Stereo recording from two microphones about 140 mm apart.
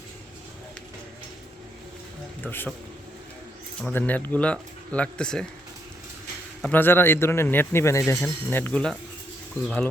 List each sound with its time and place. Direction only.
2.4 s speech: 15° left (ahead or behind)
3.8 s speech: 10° left (ahead or behind)
6.6 s speech: 10° left (ahead or behind)